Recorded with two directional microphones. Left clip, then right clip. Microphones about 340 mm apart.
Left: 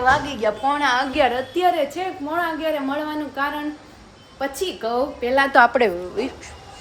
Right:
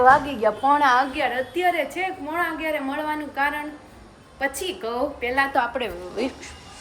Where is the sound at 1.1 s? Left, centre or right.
Centre.